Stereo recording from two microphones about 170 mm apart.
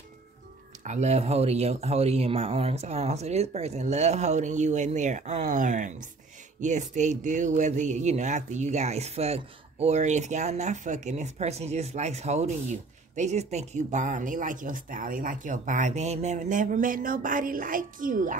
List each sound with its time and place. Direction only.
0.8 s speech: 40° right (ahead or behind)